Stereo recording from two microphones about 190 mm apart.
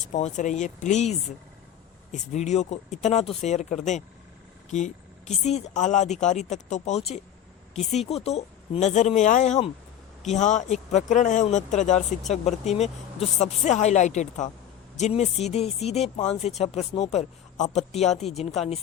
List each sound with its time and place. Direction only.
0.1 s a woman's voice: 40° left (ahead or behind)
2.1 s a woman's voice: 35° left (ahead or behind)
5.5 s a woman's voice: 35° left (ahead or behind)